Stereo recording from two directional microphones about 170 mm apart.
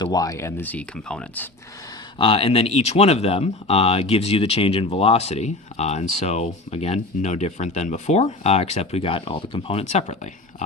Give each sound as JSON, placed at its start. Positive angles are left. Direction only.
{"t": 0.0, "sound": "speech", "side_deg": 20}
{"t": 2.1, "sound": "speech", "side_deg": 30}